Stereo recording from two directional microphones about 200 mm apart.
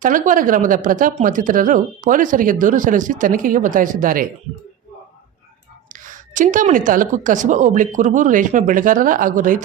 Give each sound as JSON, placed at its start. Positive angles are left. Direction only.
{"t": 0.0, "sound": "speech", "side_deg": -40}
{"t": 5.9, "sound": "speech", "side_deg": -40}